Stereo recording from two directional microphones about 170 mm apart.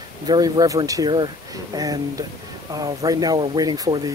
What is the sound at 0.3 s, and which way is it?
Speech, 20° right (ahead or behind).